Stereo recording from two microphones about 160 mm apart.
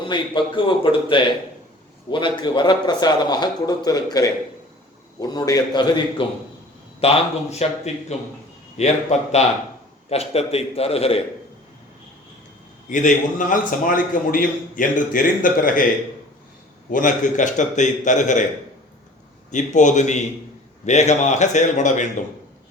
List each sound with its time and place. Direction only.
0.1 s a man's voice: 30° left (ahead or behind)
7.0 s a man's voice: 40° left (ahead or behind)
12.9 s a man's voice: 55° left (ahead or behind)
16.9 s a man's voice: 55° left (ahead or behind)
19.5 s a man's voice: 50° left (ahead or behind)